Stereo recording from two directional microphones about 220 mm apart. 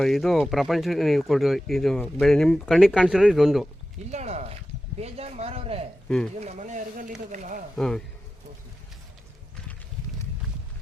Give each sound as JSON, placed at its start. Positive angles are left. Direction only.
{"t": 0.0, "sound": "speech", "side_deg": 0}
{"t": 4.1, "sound": "speech", "side_deg": -30}
{"t": 7.8, "sound": "speech", "side_deg": 0}